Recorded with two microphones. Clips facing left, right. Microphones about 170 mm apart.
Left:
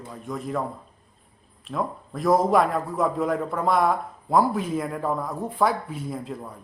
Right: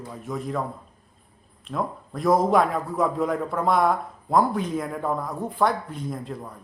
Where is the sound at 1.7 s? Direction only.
Centre (ahead or behind).